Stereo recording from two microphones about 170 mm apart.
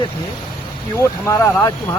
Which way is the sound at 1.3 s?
15° left (ahead or behind).